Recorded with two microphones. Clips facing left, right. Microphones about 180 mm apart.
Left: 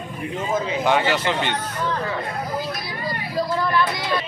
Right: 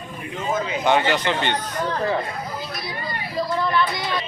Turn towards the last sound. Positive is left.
turn(degrees=-25)  # may be behind; listen again after turning